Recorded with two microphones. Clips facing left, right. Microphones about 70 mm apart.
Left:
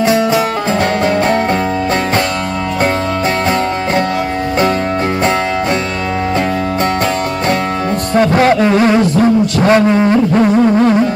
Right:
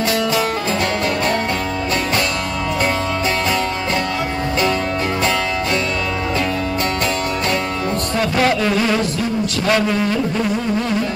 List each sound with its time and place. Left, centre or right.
0.0 s music: left
8.4 s music: left
9.7 s a sound: left
10.3 s music: left